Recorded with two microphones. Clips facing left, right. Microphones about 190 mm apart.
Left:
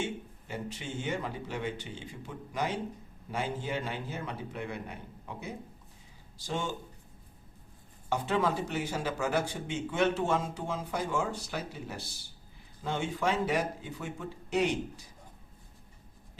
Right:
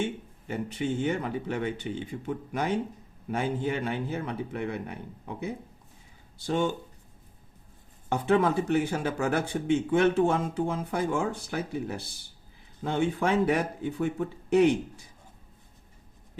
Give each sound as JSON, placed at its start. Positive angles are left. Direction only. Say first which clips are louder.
{"t": 0.0, "sound": "speech", "louder": "right 4 dB", "side_deg": -55}
{"t": 6.4, "sound": "speech", "louder": "right 7 dB", "side_deg": -60}
{"t": 8.1, "sound": "speech", "louder": "right 6 dB", "side_deg": -55}